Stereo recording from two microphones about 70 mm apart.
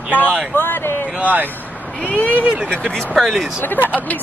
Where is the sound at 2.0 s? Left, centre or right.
Left.